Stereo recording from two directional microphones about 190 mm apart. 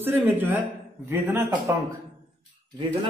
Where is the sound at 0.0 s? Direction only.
10° right (ahead or behind).